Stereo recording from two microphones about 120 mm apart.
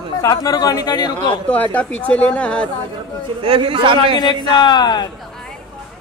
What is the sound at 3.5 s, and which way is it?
Speech, 50° right (ahead or behind).